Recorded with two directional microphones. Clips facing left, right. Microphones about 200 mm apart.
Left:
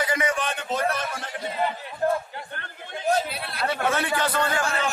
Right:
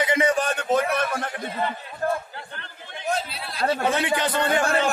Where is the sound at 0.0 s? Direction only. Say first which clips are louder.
Right 4 dB; 25° right (ahead or behind).